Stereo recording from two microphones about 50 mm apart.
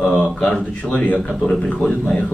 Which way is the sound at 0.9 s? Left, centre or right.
Left.